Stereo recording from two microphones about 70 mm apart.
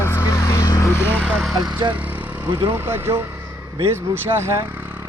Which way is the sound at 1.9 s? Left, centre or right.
Right.